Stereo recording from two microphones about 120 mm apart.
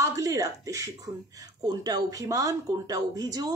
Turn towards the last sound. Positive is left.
turn(degrees=-30)  # may be behind; listen again after turning